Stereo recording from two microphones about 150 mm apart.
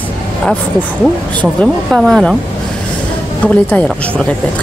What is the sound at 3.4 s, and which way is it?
Speech, 10° left (ahead or behind).